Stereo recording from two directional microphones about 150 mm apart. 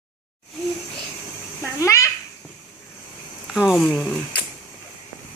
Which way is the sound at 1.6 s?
20° left (ahead or behind).